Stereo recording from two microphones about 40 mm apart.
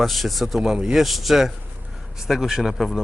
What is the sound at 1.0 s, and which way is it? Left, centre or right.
A man's voice, centre.